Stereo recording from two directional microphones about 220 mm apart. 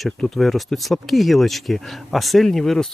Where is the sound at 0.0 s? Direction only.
Centre (ahead or behind).